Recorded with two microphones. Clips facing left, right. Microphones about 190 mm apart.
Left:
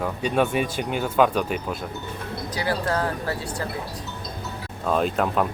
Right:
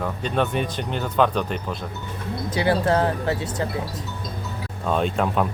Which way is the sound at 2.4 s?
25° right (ahead or behind).